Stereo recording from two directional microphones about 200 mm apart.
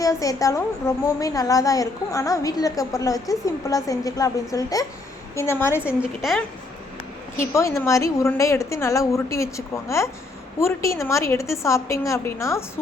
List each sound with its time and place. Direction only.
0.0 s a woman's voice: 15° left (ahead or behind)
5.8 s a woman's voice: 5° right (ahead or behind)
7.5 s a woman's voice: 15° left (ahead or behind)